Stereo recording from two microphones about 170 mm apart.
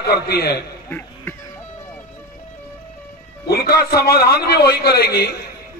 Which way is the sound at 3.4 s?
65° left (ahead or behind).